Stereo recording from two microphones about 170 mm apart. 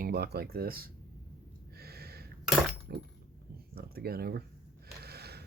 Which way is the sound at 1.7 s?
65° right (ahead or behind).